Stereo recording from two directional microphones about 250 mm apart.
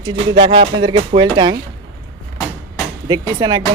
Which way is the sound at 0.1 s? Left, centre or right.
Right.